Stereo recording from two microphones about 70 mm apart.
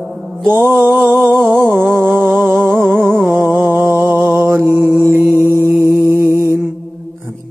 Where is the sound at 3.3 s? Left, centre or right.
Right.